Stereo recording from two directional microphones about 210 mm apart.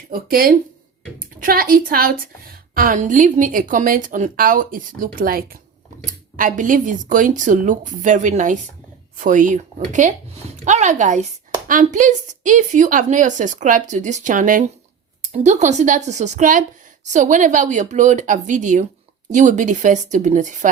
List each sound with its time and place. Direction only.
0.1 s a woman's voice: 45° right (ahead or behind)